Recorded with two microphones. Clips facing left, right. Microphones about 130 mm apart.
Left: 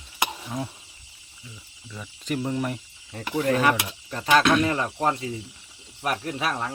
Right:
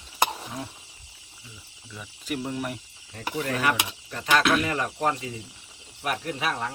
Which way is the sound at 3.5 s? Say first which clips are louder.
Left 5 dB; 35° left (ahead or behind).